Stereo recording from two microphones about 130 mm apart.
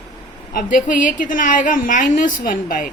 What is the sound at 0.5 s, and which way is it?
A woman's voice, 90° left.